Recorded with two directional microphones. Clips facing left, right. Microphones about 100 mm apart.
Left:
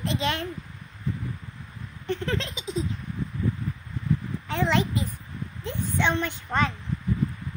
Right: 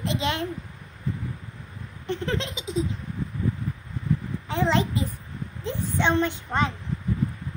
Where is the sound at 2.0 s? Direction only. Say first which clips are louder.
Right 1 dB; 25° right (ahead or behind).